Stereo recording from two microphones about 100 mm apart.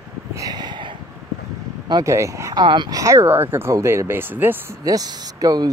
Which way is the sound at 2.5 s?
50° right (ahead or behind).